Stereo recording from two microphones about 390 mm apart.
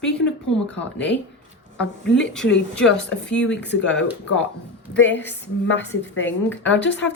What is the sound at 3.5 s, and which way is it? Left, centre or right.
Speech, left.